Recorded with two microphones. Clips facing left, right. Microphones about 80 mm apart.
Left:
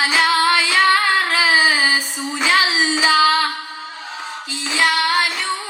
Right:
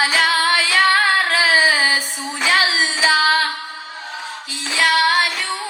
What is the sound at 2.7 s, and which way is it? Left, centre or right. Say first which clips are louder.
Child singing: left 1 dB; left.